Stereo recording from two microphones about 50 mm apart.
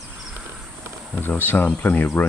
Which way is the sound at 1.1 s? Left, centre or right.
Left.